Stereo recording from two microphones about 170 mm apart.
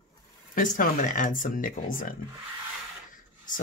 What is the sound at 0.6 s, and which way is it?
Speech, 50° left (ahead or behind).